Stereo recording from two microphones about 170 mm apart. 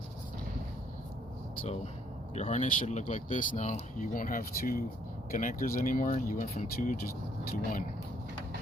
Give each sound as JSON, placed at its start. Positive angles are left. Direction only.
{"t": 1.6, "sound": "speech", "side_deg": 40}